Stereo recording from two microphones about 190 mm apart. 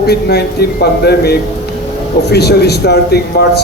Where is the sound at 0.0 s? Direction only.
60° left (ahead or behind).